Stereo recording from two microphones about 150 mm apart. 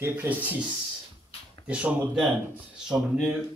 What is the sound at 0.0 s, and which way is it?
Speech, 15° right (ahead or behind).